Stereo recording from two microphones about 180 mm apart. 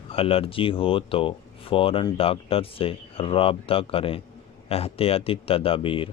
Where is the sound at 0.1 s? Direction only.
30° left (ahead or behind).